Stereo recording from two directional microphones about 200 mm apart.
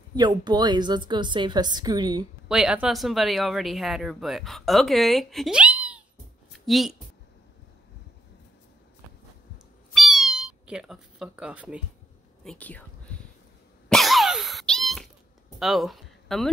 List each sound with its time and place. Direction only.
0.1 s a woman's voice: 20° right (ahead or behind)
2.4 s speech: 5° right (ahead or behind)
9.9 s cat: centre (ahead or behind)
12.4 s speech: 5° left (ahead or behind)
13.8 s cough: centre (ahead or behind)
15.6 s a sound: centre (ahead or behind)